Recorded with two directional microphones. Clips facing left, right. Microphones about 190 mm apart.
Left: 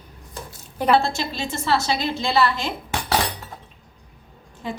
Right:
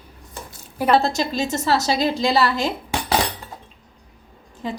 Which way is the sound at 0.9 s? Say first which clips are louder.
Right 3 dB; 40° right (ahead or behind).